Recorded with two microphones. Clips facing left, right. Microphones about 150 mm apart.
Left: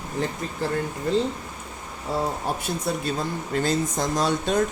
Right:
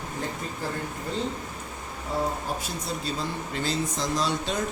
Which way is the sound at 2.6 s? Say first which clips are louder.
Left 5 dB; 50° left (ahead or behind).